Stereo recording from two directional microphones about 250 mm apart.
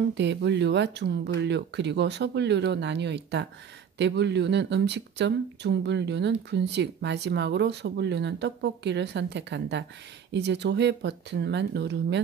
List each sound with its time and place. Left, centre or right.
0.1 s speech: right